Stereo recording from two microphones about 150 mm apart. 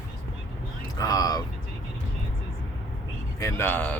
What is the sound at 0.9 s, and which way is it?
Speech, 25° left (ahead or behind).